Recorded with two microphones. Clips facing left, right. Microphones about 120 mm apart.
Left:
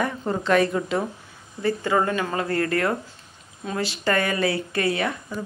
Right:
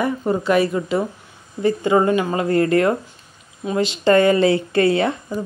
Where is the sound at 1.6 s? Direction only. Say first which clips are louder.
Right 6 dB; 20° right (ahead or behind).